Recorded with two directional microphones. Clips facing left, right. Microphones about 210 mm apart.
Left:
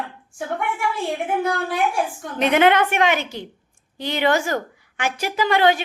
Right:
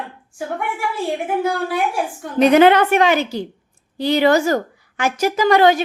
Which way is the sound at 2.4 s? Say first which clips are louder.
Right 5 dB; 40° right (ahead or behind).